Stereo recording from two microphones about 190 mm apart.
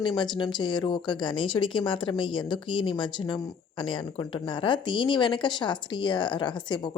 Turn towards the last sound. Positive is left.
turn(degrees=25)  # may be behind; listen again after turning